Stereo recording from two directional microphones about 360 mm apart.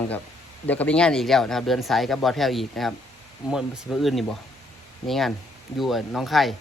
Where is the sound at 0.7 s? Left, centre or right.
Centre.